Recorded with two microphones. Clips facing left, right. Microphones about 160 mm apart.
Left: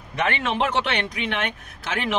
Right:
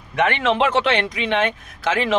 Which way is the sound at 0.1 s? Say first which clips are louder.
Right 5 dB; 75° right (ahead or behind).